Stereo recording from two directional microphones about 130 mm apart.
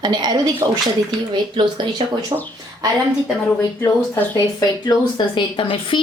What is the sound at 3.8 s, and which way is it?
Speech, 20° left (ahead or behind).